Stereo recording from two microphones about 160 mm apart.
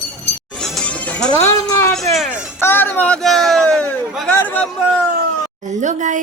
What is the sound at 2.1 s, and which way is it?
Music, 5° right (ahead or behind).